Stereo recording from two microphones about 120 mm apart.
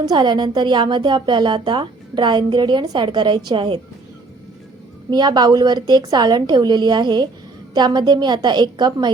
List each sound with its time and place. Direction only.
0.0 s a woman's voice: 35° right (ahead or behind)
5.1 s a woman's voice: 35° right (ahead or behind)